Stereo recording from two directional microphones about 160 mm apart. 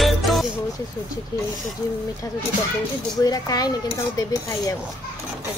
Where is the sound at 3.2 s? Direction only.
20° left (ahead or behind).